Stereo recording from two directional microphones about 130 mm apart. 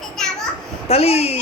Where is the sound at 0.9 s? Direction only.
50° left (ahead or behind).